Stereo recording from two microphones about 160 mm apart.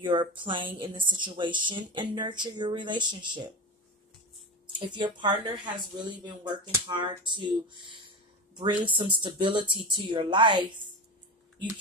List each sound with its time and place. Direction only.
0.0 s a woman's voice: 30° right (ahead or behind)
4.7 s speech: 30° right (ahead or behind)